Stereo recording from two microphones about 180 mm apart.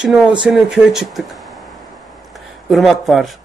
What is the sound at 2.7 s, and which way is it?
Speech, centre (ahead or behind).